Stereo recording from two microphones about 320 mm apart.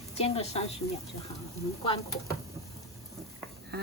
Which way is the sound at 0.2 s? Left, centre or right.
Centre.